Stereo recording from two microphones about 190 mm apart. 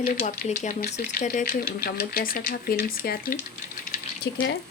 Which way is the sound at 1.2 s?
45° left (ahead or behind).